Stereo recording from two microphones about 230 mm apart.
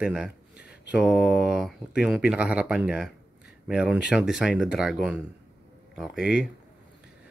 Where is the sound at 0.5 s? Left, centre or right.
Left.